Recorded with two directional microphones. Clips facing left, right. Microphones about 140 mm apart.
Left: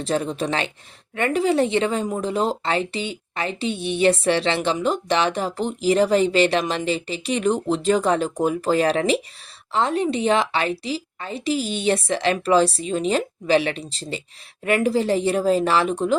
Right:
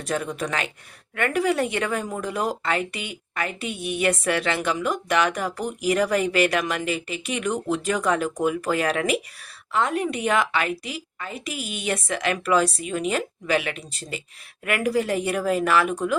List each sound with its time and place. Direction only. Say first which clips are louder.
0.0 s speech: left 4 dB; 25° left (ahead or behind)